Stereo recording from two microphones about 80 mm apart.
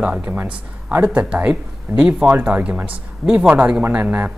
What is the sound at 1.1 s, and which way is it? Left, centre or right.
Speech, centre.